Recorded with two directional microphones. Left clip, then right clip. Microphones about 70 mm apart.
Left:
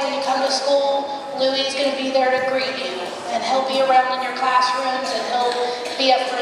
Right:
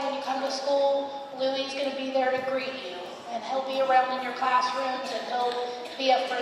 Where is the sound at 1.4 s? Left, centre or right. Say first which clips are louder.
Left 8 dB; left.